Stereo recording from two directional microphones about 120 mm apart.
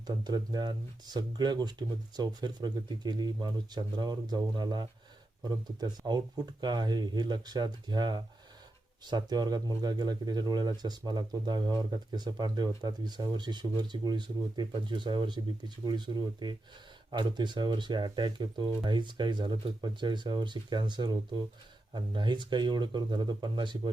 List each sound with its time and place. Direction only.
0.3 s speech: 35° right (ahead or behind)